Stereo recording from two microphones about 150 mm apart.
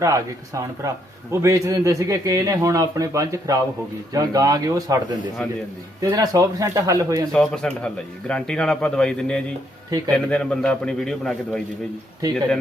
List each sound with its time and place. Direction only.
0.0 s a man's voice: 20° right (ahead or behind)
6.0 s a man's voice: 25° right (ahead or behind)
7.3 s a man's voice: 5° left (ahead or behind)